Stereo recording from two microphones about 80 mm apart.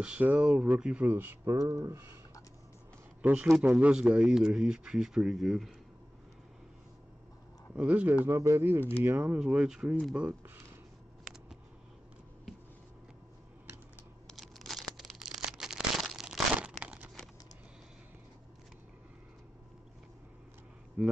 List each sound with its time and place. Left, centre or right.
0.0 s speech: centre
1.0 s speech: right
1.4 s speech: right
3.2 s speech: centre
7.7 s speech: centre
8.3 s speech: right; by 9.9 s centre
14.3 s a sound: centre
16.5 s crumpling: centre
21.0 s a sound: centre